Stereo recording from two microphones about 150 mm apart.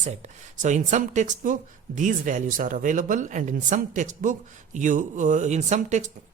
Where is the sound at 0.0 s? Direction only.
50° right (ahead or behind).